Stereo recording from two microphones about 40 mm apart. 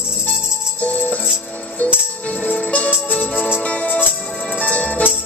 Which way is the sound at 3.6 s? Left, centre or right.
Left.